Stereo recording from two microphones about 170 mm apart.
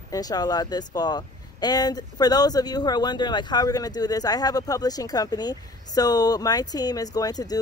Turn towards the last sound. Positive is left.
turn(degrees=20)  # may be behind; listen again after turning